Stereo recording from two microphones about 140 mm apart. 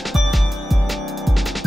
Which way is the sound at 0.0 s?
Centre (ahead or behind).